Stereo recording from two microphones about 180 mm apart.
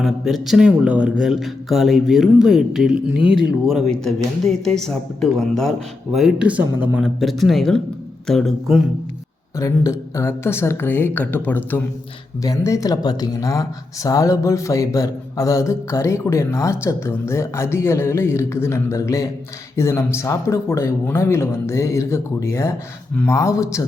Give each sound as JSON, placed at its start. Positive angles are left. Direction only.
{"t": 0.0, "sound": "speech", "side_deg": 0}
{"t": 4.6, "sound": "speech", "side_deg": 5}
{"t": 9.6, "sound": "speech", "side_deg": 15}